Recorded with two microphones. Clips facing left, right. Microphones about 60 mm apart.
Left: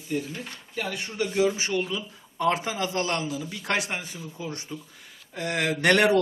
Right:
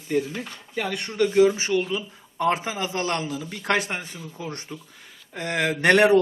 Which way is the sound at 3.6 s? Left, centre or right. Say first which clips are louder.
Right 5 dB; right.